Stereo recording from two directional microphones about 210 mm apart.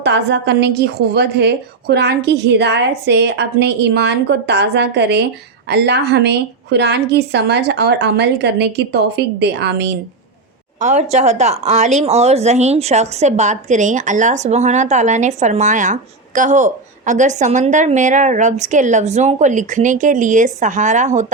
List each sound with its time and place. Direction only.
0.0 s a woman's voice: 55° right (ahead or behind)
10.8 s speech: 35° right (ahead or behind)